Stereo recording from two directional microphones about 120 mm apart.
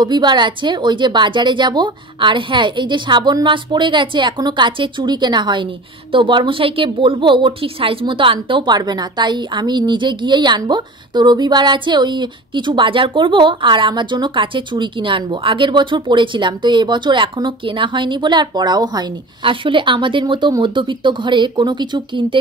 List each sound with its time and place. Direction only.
0.0 s a woman's voice: 40° right (ahead or behind)